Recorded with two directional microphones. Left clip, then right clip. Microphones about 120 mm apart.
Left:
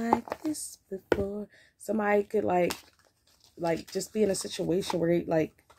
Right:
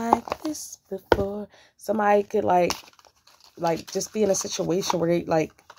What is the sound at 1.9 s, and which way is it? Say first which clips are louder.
Speech: right 6 dB; 15° left (ahead or behind).